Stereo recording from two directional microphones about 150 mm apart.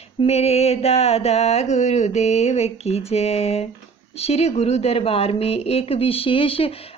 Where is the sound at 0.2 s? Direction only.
45° left (ahead or behind).